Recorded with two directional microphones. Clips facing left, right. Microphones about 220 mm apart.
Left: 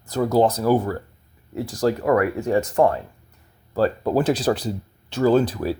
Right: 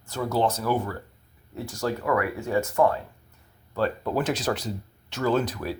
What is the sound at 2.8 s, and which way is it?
Speech, 30° left (ahead or behind).